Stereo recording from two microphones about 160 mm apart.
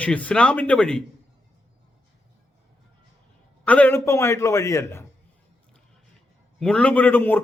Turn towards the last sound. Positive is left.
turn(degrees=10)  # may be behind; listen again after turning